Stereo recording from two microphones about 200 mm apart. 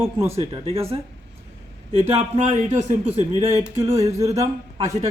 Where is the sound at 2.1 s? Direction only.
35° right (ahead or behind).